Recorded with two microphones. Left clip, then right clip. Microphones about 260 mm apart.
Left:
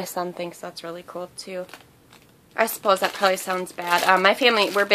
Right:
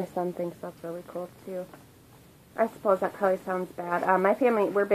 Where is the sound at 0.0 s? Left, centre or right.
Centre.